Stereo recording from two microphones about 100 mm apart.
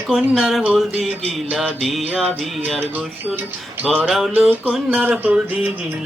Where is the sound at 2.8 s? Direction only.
20° right (ahead or behind).